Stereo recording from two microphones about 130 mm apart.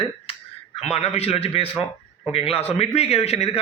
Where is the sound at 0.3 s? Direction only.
50° left (ahead or behind).